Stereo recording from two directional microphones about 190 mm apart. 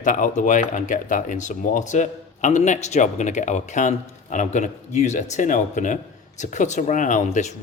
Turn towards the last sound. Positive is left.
turn(degrees=40)  # may be behind; listen again after turning